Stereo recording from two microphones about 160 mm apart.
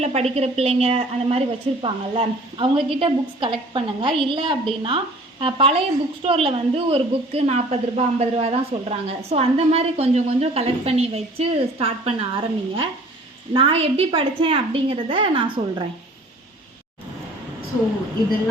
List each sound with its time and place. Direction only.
0.0 s a woman's voice: 40° right (ahead or behind)